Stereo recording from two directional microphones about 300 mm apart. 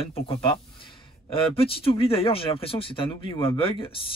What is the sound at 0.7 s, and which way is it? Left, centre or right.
Speech, centre.